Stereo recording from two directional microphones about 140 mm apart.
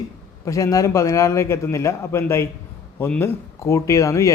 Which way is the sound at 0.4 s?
25° left (ahead or behind).